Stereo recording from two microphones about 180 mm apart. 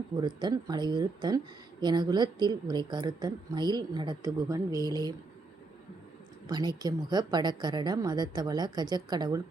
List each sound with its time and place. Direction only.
0.2 s speech: 25° right (ahead or behind)
6.5 s speech: 25° right (ahead or behind)